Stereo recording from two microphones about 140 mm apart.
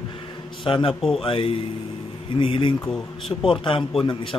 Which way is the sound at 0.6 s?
40° left (ahead or behind).